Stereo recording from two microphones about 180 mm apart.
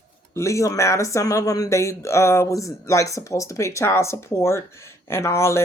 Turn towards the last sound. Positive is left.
turn(degrees=15)  # may be behind; listen again after turning